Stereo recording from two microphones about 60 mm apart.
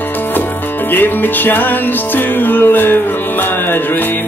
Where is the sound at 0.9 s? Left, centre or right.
Left.